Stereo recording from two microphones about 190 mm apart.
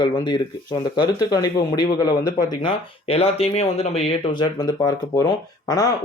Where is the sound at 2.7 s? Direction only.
30° left (ahead or behind).